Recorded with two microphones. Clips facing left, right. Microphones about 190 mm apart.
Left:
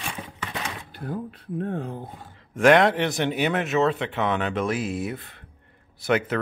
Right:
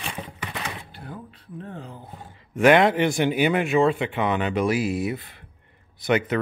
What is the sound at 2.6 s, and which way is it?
Speech, 5° right (ahead or behind).